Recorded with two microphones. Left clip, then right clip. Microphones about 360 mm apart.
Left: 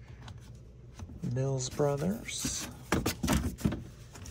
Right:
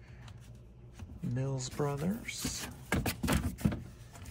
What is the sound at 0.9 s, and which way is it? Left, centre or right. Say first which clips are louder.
Speech: left 4 dB; centre.